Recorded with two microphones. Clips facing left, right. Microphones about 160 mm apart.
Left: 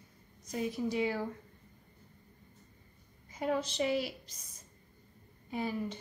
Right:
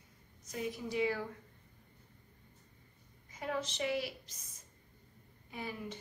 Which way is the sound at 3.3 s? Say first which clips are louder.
Left 5 dB; 35° left (ahead or behind).